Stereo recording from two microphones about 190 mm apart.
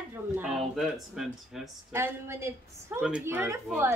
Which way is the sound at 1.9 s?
15° right (ahead or behind).